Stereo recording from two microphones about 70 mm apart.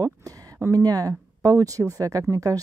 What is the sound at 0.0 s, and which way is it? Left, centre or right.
Speech, right.